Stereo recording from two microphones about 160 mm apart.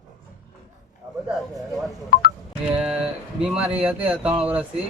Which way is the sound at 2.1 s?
70° left (ahead or behind).